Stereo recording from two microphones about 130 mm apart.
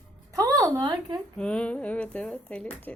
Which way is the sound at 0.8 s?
30° right (ahead or behind).